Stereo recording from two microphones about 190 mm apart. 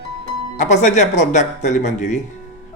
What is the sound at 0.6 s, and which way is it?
A man's voice, 40° left (ahead or behind).